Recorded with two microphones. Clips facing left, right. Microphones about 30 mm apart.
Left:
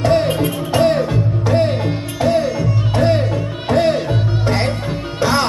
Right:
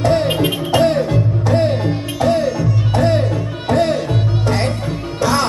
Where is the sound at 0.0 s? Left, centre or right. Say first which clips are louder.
Left 1 dB; centre.